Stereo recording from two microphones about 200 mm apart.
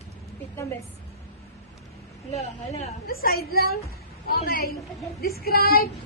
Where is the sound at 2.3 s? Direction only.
35° left (ahead or behind).